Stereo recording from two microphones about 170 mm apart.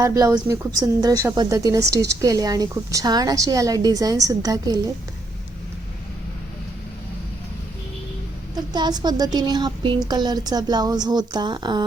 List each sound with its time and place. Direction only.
0.0 s a woman's voice: 20° right (ahead or behind)
8.5 s a woman's voice: 25° right (ahead or behind)